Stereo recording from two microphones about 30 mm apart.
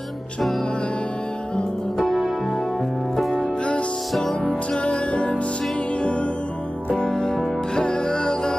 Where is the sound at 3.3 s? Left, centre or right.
Left.